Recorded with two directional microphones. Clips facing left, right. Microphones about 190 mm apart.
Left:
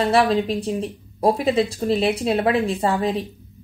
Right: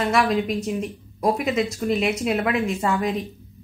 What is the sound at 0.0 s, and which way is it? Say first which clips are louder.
A woman's voice: left 3 dB; 30° left (ahead or behind).